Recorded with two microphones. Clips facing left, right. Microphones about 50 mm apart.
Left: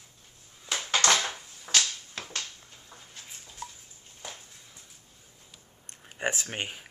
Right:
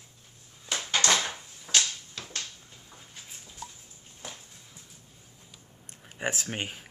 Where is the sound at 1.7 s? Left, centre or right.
Left.